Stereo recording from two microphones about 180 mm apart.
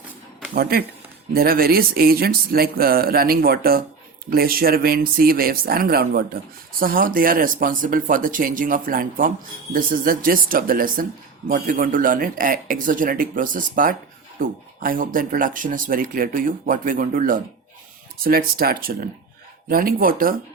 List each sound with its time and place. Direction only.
0.5 s speech: 55° right (ahead or behind)